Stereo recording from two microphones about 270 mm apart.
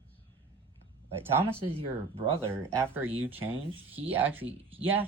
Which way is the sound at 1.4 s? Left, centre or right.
Centre.